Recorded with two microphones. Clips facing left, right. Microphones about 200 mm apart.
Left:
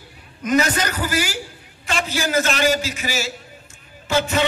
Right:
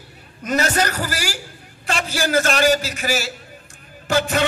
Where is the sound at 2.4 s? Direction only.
45° right (ahead or behind).